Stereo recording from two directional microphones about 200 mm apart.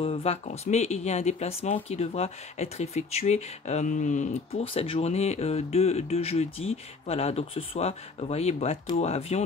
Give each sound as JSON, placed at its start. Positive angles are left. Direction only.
{"t": 0.0, "sound": "speech", "side_deg": 30}